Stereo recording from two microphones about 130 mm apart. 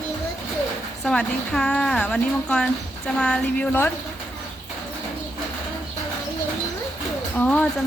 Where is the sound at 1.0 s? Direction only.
5° left (ahead or behind).